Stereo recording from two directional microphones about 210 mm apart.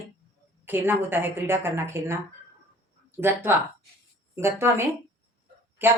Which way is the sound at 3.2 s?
10° right (ahead or behind).